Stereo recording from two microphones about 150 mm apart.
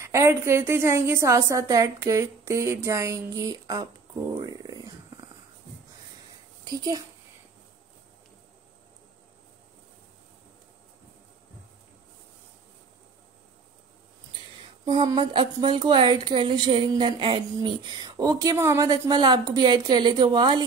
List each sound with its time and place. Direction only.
0.0 s speech: 20° right (ahead or behind)
4.3 s a sound: 25° right (ahead or behind)
6.6 s a woman's voice: 25° right (ahead or behind)
14.9 s speech: 30° right (ahead or behind)